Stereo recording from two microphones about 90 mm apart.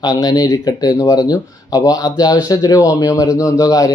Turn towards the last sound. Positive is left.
turn(degrees=40)  # may be behind; listen again after turning